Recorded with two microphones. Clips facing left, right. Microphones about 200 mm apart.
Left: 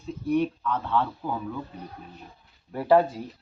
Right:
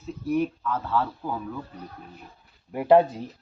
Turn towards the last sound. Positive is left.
turn(degrees=-20)  # may be behind; listen again after turning